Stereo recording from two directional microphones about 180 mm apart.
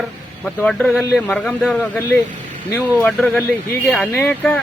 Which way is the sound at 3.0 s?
5° left (ahead or behind).